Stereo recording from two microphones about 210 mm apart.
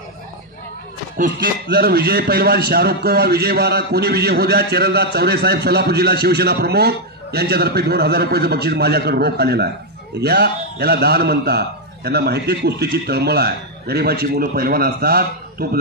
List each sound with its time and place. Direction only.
1.1 s a man's voice: 40° right (ahead or behind)